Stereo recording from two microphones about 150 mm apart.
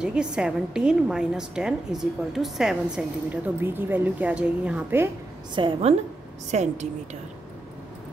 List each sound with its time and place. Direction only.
0.0 s a woman's voice: 5° right (ahead or behind)
5.5 s a woman's voice: 35° right (ahead or behind)
6.5 s a woman's voice: 50° right (ahead or behind)